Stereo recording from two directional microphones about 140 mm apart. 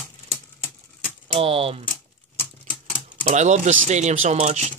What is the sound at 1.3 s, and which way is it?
Mechanisms, 40° right (ahead or behind).